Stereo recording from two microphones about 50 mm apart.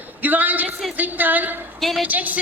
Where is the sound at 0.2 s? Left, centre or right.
Right.